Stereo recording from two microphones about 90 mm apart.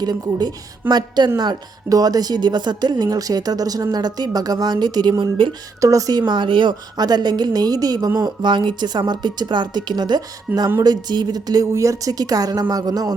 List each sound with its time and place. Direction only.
0.0 s speech: 50° right (ahead or behind)
5.2 s speech: 65° right (ahead or behind)
5.8 s speech: 40° right (ahead or behind)
6.2 s speech: 60° right (ahead or behind)
6.9 s speech: 50° right (ahead or behind)
11.6 s speech: 35° right (ahead or behind)